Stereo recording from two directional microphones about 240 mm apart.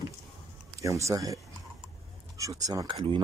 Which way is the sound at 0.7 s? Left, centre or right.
Centre.